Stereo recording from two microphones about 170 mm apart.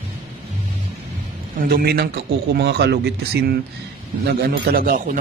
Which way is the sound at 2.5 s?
75° right (ahead or behind).